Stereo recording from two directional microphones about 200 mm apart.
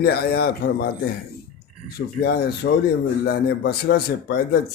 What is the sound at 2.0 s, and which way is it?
Speech, 50° left (ahead or behind).